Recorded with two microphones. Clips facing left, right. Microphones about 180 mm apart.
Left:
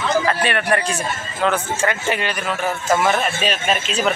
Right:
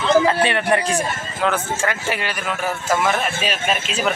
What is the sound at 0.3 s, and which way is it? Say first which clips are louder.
Speech: right 1 dB; 25° right (ahead or behind).